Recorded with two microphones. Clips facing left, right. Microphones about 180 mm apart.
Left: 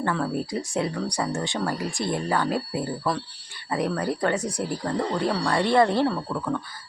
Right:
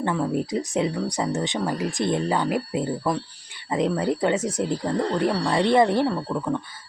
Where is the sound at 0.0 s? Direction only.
20° right (ahead or behind).